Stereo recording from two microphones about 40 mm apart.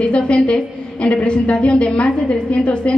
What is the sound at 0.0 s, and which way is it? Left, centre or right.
A woman's voice, left.